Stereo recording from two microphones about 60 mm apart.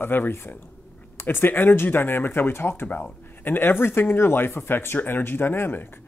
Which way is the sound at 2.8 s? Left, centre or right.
Left.